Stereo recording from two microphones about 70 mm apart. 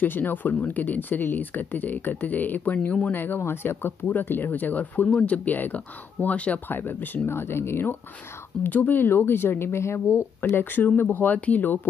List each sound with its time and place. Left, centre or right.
0.0 s speech: left
3.2 s speech: left